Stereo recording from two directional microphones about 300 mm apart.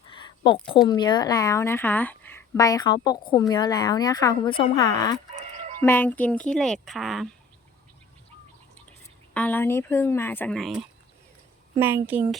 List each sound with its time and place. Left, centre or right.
0.1 s a sound: centre
0.9 s a woman's voice: centre
9.3 s a woman's voice: centre